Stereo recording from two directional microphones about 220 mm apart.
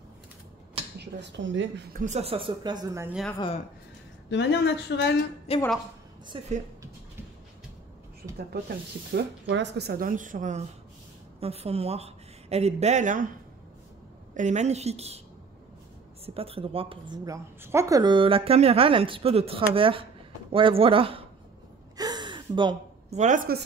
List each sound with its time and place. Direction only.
0.9 s speech: 55° right (ahead or behind)
2.0 s a woman's voice: 30° right (ahead or behind); by 3.2 s 15° right (ahead or behind)
4.3 s speech: 50° left (ahead or behind)
5.5 s a woman's voice: 25° left (ahead or behind)
6.2 s a woman's voice: 20° right (ahead or behind)
8.6 s speech: 50° right (ahead or behind); by 13.3 s 35° right (ahead or behind)
14.3 s a woman's voice: 35° right (ahead or behind)
16.3 s a woman's voice: 25° right (ahead or behind)
21.9 s gasp: 20° right (ahead or behind); by 23.6 s 40° right (ahead or behind)